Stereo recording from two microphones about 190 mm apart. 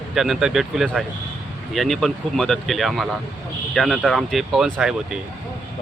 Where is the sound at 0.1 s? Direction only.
Centre (ahead or behind).